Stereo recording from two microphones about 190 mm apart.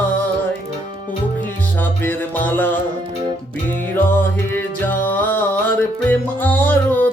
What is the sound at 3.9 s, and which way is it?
Music, 10° left (ahead or behind).